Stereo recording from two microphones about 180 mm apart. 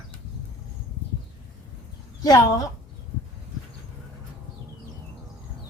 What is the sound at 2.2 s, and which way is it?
Speech, 20° left (ahead or behind).